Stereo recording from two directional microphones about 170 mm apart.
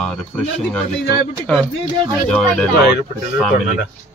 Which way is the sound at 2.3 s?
5° left (ahead or behind).